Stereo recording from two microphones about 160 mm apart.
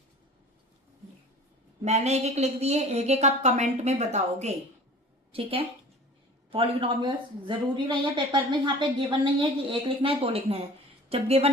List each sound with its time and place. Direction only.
1.8 s a woman's voice: 45° right (ahead or behind)